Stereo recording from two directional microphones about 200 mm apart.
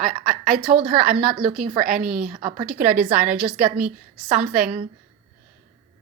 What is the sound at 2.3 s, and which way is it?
Speech, 40° right (ahead or behind).